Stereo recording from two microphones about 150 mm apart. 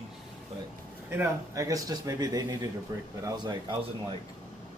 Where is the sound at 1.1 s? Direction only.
20° right (ahead or behind).